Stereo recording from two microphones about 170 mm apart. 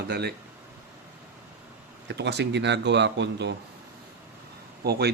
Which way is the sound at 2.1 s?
85° right.